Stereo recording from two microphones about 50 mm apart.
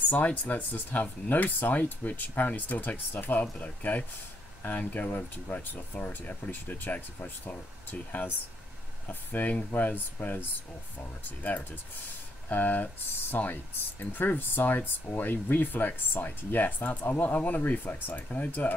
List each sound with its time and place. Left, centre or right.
0.1 s speech: left